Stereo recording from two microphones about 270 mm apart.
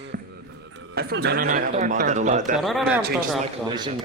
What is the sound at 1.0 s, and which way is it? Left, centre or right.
Speech, right.